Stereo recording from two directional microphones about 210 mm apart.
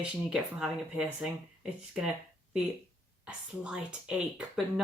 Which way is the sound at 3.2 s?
5° right (ahead or behind).